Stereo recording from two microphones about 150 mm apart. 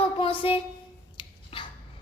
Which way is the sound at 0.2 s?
40° left (ahead or behind).